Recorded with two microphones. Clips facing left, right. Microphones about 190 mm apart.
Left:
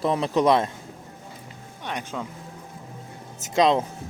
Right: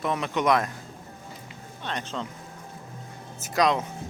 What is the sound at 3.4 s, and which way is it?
Speech, 20° left (ahead or behind).